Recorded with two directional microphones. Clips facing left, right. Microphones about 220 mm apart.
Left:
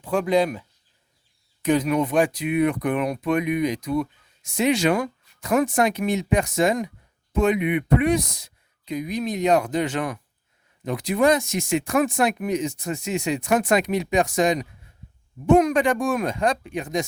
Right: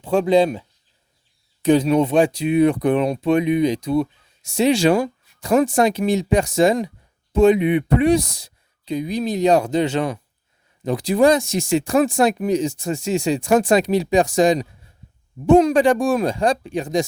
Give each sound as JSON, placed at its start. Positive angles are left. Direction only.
{"t": 0.0, "sound": "speech", "side_deg": -25}
{"t": 1.6, "sound": "speech", "side_deg": -30}